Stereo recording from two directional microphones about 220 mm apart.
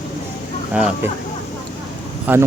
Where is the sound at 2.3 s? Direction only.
5° right (ahead or behind).